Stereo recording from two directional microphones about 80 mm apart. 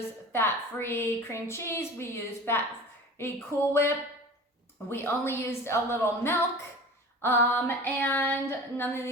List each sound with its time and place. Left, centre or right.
0.3 s a woman's voice: left
7.2 s female singing: left